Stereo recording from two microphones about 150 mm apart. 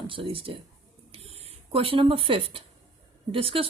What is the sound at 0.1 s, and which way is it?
Speech, 35° right (ahead or behind).